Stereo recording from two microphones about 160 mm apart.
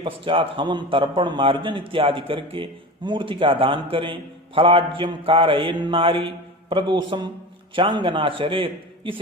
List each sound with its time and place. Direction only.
0.0 s a man's voice: 30° right (ahead or behind)